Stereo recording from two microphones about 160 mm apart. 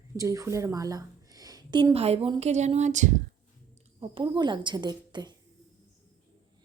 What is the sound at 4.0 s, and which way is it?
Speech, 30° right (ahead or behind).